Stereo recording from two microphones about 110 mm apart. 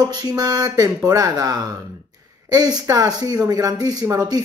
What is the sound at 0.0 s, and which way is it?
Speech, 40° right (ahead or behind).